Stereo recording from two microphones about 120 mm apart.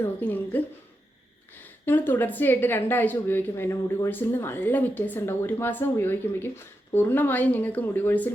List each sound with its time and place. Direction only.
0.0 s speech: 15° left (ahead or behind)
1.8 s speech: 15° left (ahead or behind)